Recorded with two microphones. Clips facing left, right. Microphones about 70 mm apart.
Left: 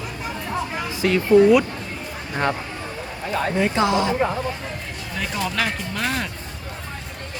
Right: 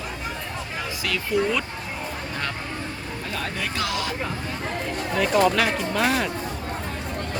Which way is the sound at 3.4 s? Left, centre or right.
Left.